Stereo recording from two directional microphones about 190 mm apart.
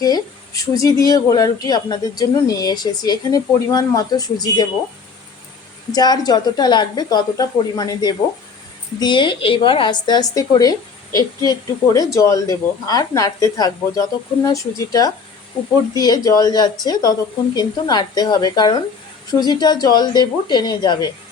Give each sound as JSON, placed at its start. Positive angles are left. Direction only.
{"t": 0.0, "sound": "speech", "side_deg": 20}
{"t": 5.9, "sound": "a woman's voice", "side_deg": 20}